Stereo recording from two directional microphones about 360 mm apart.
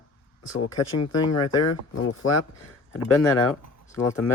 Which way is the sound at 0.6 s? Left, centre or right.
Left.